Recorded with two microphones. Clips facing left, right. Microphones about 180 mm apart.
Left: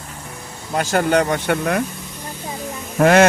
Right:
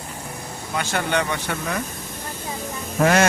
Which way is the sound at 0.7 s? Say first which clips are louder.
Left 6 dB; 40° left (ahead or behind).